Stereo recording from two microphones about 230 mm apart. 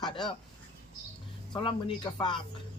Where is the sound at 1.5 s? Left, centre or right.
Left.